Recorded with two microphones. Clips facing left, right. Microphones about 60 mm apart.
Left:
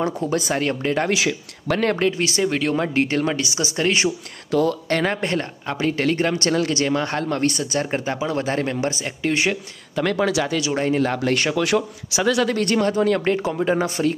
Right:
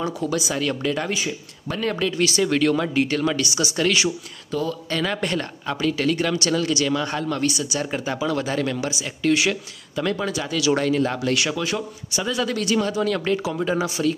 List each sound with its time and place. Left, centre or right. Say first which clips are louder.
0.3 s speech: left 2 dB; left
1.1 s speech: left 5 dB; left
2.1 s speech: even; left
2.5 s speech: right 2 dB; centre
2.8 s speech: left 1 dB; left
4.5 s a man's voice: left 6 dB; left
5.1 s speech: left 1 dB; left
8.8 s speech: right 1 dB; left
9.9 s speech: left 4 dB; left
11.6 s a man's voice: left 6 dB; left
12.4 s speech: left 3 dB; left